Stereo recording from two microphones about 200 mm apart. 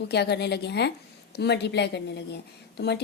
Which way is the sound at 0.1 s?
55° left (ahead or behind).